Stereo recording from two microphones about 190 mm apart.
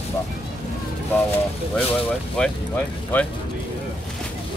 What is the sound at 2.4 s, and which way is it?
Speech, 10° left (ahead or behind).